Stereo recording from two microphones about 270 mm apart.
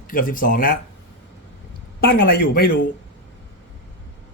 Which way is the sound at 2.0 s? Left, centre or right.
Left.